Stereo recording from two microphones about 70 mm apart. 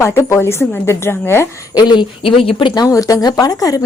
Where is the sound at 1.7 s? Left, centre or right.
Left.